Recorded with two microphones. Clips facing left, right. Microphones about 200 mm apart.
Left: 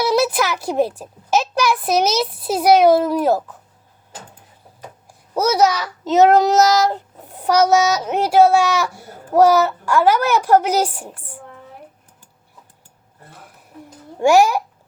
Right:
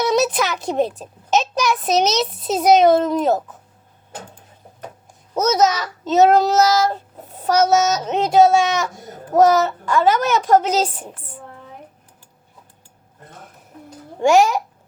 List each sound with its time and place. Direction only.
0.0 s a child's voice: 5° left (ahead or behind)
5.3 s a child's voice: 10° left (ahead or behind)
14.2 s a child's voice: 10° left (ahead or behind)